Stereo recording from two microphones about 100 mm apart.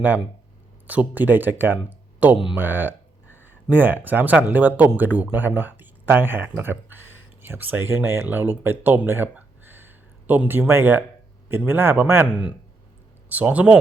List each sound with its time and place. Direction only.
0.9 s speech: 15° right (ahead or behind)
12.3 s speech: 10° right (ahead or behind)